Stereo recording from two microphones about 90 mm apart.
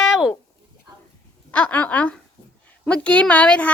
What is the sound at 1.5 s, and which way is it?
A woman's voice, 15° left (ahead or behind).